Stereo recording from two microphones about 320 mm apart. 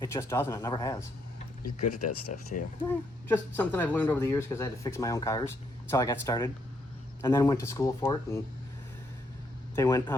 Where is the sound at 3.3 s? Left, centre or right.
Centre.